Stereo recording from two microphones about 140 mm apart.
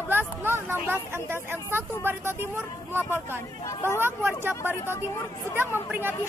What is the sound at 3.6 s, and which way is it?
Speech, 20° left (ahead or behind).